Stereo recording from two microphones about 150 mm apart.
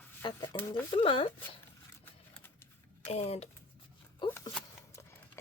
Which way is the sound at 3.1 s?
45° left (ahead or behind).